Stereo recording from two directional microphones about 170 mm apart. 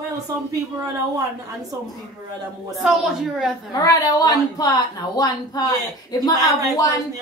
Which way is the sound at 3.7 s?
20° left (ahead or behind).